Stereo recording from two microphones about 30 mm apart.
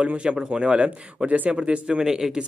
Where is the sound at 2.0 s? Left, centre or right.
Right.